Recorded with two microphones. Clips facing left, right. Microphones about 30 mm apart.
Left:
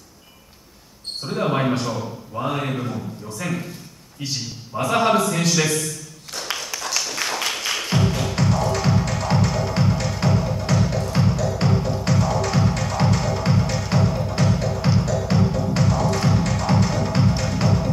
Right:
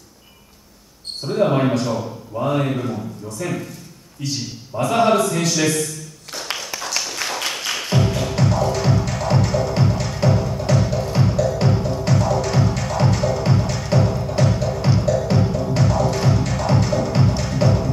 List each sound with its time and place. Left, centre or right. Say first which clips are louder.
1.2 s a man's voice: right 4 dB; centre
4.2 s a man's voice: right 2 dB; left
4.8 s speech: right 2 dB; centre
5.5 s a sound: right 1 dB; centre
6.4 s music: even; centre